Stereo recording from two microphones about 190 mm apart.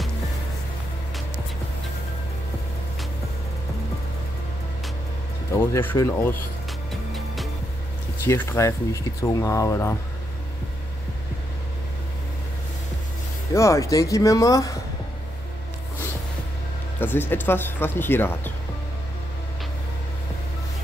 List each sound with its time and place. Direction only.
5.5 s speech: 10° left (ahead or behind)
8.2 s speech: 15° left (ahead or behind)
13.5 s speech: 15° left (ahead or behind)
17.0 s speech: 10° left (ahead or behind)